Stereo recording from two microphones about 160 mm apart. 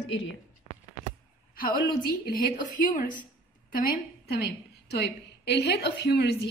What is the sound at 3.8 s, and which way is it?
Speech, 70° left (ahead or behind).